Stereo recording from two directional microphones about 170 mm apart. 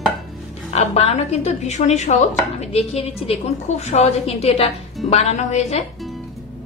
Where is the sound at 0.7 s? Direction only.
40° left (ahead or behind).